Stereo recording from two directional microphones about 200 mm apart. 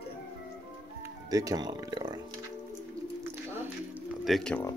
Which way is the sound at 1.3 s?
20° right (ahead or behind).